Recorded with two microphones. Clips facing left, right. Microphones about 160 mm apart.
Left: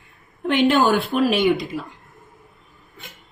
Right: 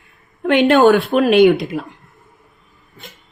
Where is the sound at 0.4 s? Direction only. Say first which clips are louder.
Right 6 dB; 70° right (ahead or behind).